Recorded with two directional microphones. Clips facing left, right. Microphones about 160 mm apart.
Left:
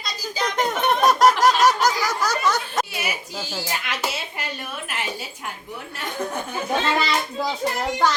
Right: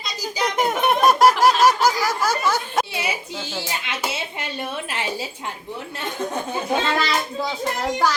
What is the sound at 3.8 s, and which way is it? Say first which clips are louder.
Speech: right 1 dB; 25° right (ahead or behind).